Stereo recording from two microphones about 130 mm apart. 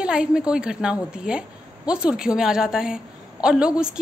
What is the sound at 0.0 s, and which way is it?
A woman's voice, 5° right (ahead or behind).